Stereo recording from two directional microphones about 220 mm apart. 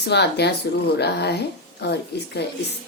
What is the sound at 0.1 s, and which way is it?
A woman's voice, 50° left (ahead or behind).